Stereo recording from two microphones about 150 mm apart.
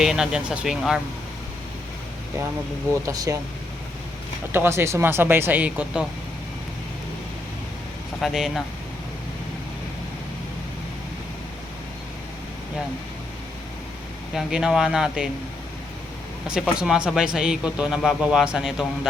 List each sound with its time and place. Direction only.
0.0 s a man's voice: 5° right (ahead or behind)
2.9 s speech: 20° right (ahead or behind)
4.5 s speech: 15° right (ahead or behind)
8.2 s a man's voice: 5° right (ahead or behind)
14.3 s a man's voice: 5° right (ahead or behind)
16.5 s a man's voice: 5° right (ahead or behind)